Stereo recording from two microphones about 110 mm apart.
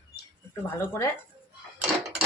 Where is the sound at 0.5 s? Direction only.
20° left (ahead or behind).